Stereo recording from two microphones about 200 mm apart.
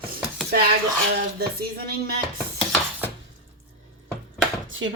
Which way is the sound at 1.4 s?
50° right (ahead or behind).